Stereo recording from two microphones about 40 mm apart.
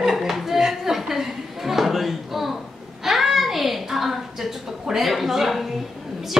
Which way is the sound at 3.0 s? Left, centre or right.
Centre.